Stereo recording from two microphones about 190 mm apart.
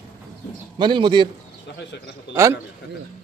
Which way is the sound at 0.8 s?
25° right (ahead or behind).